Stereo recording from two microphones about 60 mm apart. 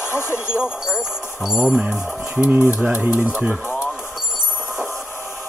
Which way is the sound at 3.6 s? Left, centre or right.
Left.